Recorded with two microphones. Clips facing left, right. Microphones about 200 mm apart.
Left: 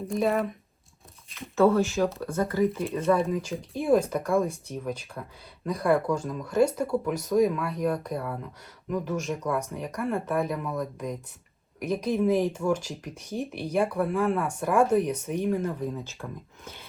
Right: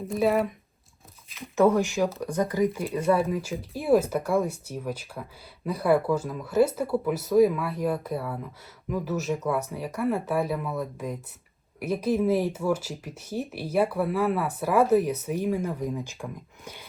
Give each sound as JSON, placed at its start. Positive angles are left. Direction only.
{"t": 0.1, "sound": "speech", "side_deg": 0}
{"t": 1.5, "sound": "speech", "side_deg": -15}